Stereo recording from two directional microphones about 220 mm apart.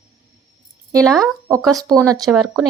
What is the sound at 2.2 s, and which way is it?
Speech, 5° right (ahead or behind).